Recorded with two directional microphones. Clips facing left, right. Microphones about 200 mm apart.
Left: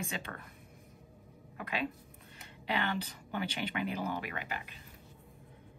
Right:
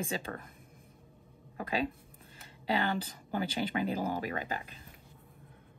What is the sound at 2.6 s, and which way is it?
Speech, 35° right (ahead or behind).